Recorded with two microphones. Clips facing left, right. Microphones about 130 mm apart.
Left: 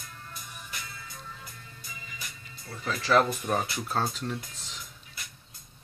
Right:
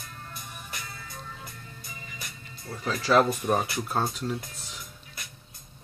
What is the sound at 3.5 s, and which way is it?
Speech, 5° right (ahead or behind).